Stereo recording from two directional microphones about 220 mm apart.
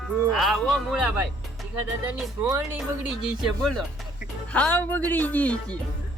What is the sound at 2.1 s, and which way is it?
Speech, centre (ahead or behind).